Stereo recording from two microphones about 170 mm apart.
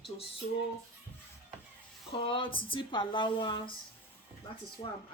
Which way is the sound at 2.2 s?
30° left (ahead or behind).